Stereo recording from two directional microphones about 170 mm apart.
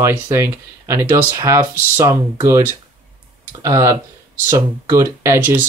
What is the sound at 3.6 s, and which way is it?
Speech, 15° right (ahead or behind).